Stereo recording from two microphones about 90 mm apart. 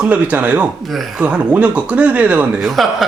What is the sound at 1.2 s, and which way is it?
Speech, 15° right (ahead or behind).